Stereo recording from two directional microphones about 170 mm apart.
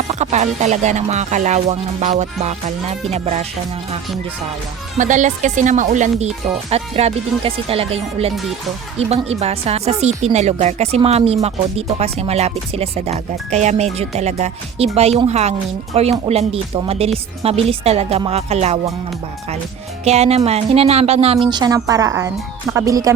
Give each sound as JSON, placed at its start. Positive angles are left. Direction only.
{"t": 0.1, "sound": "speech", "side_deg": -40}
{"t": 4.9, "sound": "speech", "side_deg": -45}
{"t": 20.1, "sound": "speech", "side_deg": -40}
{"t": 21.4, "sound": "speech", "side_deg": -25}